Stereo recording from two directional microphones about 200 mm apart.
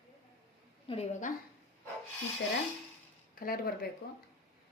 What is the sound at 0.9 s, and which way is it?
Speech, 35° left (ahead or behind).